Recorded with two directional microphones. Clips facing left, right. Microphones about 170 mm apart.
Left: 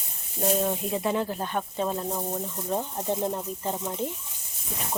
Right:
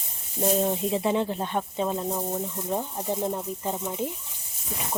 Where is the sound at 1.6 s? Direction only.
10° right (ahead or behind).